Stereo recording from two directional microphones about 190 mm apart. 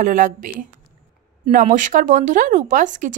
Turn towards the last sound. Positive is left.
turn(degrees=-40)  # may be behind; listen again after turning